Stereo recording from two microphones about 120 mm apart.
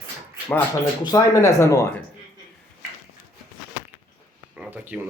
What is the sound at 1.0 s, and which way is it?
Speech, 30° left (ahead or behind).